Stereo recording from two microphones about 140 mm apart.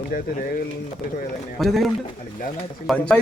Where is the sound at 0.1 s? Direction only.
75° left (ahead or behind).